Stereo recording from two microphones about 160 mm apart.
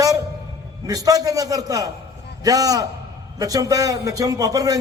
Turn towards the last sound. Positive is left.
turn(degrees=-20)  # may be behind; listen again after turning